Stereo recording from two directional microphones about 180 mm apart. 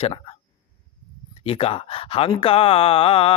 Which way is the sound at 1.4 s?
30° left (ahead or behind).